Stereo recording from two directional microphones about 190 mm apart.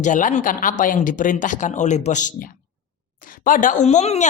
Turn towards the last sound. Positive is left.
turn(degrees=35)  # may be behind; listen again after turning